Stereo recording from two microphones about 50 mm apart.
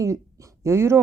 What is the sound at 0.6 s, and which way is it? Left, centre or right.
Speech, right.